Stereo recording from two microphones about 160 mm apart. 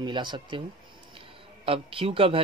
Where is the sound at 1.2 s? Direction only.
35° right (ahead or behind).